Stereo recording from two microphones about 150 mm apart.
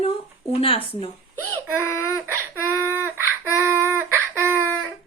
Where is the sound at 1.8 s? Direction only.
15° left (ahead or behind).